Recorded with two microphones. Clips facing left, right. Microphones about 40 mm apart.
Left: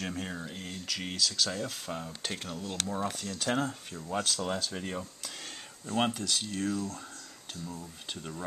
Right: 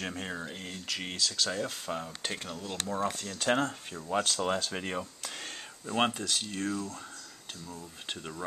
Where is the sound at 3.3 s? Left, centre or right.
Right.